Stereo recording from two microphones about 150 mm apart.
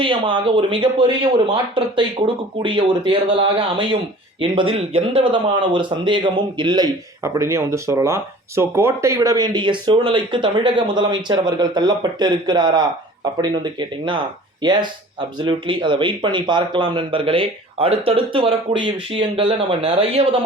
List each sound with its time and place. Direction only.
0.0 s speech: 35° right (ahead or behind)